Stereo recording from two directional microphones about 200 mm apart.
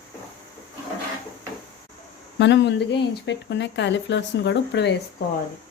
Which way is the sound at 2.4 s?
60° left (ahead or behind).